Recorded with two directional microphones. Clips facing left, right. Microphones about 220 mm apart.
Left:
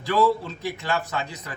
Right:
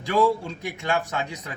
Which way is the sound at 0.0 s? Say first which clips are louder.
Even; 15° right (ahead or behind).